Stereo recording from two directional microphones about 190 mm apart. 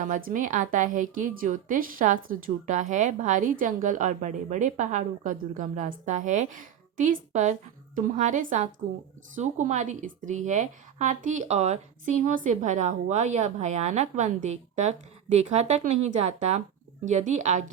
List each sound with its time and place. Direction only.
0.0 s a woman's voice: 45° right (ahead or behind)